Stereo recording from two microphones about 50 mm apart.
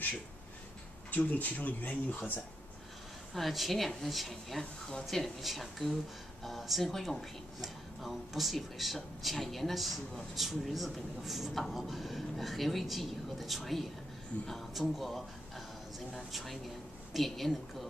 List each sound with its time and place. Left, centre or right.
1.1 s speech: left
3.3 s a woman's voice: centre